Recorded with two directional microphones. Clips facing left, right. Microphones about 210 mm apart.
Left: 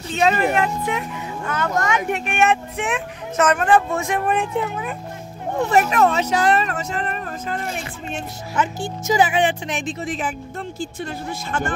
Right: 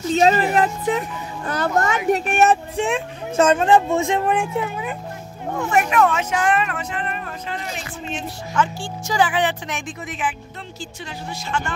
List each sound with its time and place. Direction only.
0.1 s a child's voice: 35° right (ahead or behind); by 4.5 s 15° right (ahead or behind)
5.6 s speech: 35° left (ahead or behind)
8.5 s a woman's voice: 20° left (ahead or behind)
10.8 s speech: 55° left (ahead or behind)